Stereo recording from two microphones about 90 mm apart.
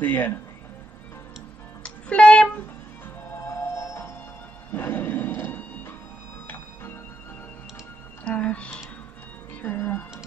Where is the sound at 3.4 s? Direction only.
30° left (ahead or behind).